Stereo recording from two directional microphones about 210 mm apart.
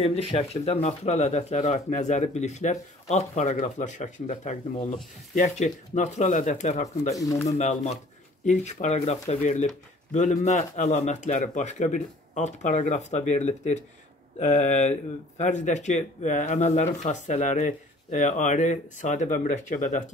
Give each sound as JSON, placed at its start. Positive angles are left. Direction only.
{"t": 0.0, "sound": "speech", "side_deg": 30}
{"t": 7.2, "sound": "speech", "side_deg": 15}
{"t": 7.4, "sound": "speech", "side_deg": 30}